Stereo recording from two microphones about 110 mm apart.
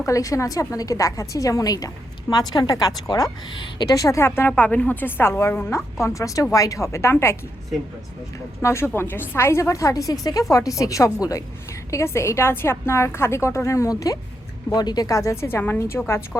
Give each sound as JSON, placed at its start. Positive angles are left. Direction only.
{"t": 0.0, "sound": "a woman's voice", "side_deg": 30}
{"t": 4.3, "sound": "a woman's voice", "side_deg": 20}
{"t": 8.6, "sound": "a woman's voice", "side_deg": 25}
{"t": 14.7, "sound": "a woman's voice", "side_deg": 40}